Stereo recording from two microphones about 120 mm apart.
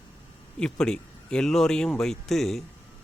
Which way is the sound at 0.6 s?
5° left (ahead or behind).